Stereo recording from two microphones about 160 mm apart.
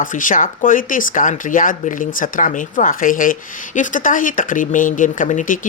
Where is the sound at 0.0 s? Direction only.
55° left (ahead or behind).